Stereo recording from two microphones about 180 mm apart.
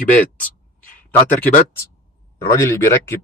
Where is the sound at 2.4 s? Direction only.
15° left (ahead or behind).